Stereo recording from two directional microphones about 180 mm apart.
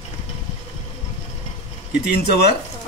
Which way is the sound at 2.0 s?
60° left (ahead or behind).